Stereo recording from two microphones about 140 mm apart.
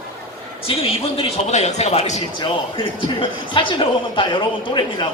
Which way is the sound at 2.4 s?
35° left (ahead or behind).